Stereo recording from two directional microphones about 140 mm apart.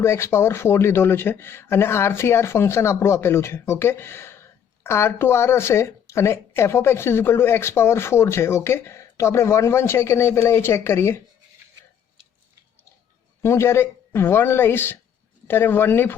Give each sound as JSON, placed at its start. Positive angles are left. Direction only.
{"t": 0.0, "sound": "speech", "side_deg": 20}
{"t": 13.4, "sound": "speech", "side_deg": 20}